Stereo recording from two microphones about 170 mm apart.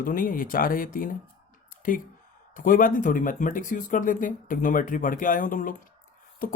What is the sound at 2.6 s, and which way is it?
Speech, 55° left (ahead or behind).